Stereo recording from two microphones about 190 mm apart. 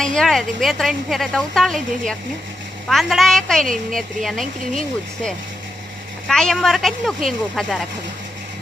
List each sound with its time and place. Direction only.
0.0 s a woman's voice: centre (ahead or behind)
6.2 s a woman's voice: 5° left (ahead or behind)